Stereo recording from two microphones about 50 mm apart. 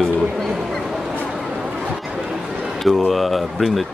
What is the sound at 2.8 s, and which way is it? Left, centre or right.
Speech, centre.